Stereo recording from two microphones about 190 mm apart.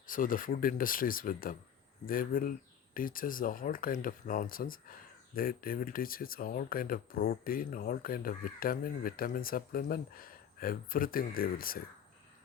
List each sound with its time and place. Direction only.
0.1 s speech: 45° left (ahead or behind)